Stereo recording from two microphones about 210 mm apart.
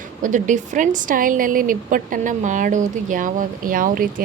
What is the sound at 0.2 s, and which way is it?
A woman's voice, 35° right (ahead or behind).